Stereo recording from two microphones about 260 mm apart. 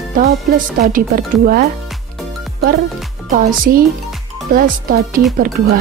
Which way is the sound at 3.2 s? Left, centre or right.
Right.